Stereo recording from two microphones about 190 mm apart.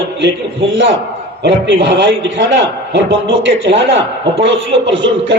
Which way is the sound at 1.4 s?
65° right (ahead or behind).